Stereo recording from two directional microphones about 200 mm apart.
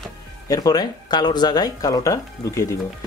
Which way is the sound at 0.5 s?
20° left (ahead or behind).